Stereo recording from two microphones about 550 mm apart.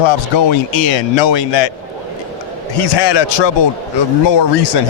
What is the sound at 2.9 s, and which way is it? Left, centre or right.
Speech, left.